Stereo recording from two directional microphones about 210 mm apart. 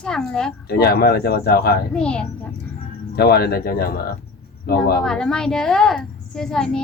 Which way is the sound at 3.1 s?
50° left (ahead or behind).